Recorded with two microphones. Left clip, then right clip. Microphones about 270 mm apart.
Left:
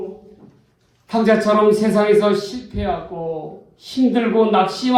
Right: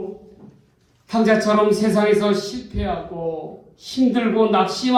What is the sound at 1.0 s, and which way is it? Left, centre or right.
Speech, left.